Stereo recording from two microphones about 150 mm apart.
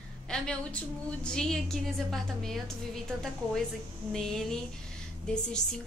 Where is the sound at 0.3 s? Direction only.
5° left (ahead or behind).